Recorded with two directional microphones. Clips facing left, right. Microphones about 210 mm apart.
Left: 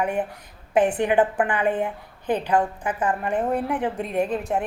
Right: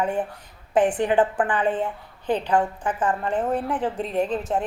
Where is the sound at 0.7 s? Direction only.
10° left (ahead or behind).